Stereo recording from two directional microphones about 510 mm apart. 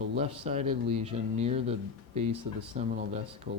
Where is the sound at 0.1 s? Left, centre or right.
Centre.